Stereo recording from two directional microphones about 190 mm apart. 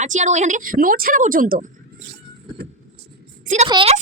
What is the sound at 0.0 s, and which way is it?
A woman's voice, 40° right (ahead or behind).